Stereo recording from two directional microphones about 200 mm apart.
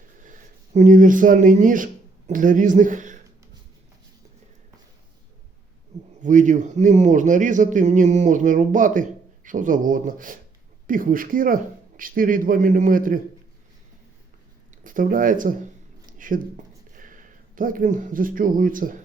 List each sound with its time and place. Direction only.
0.2 s speech: 40° right (ahead or behind)
6.1 s a man's voice: 40° right (ahead or behind)
14.8 s speech: 40° right (ahead or behind)
16.0 s a sound: 40° right (ahead or behind)
16.9 s a man's voice: 40° right (ahead or behind)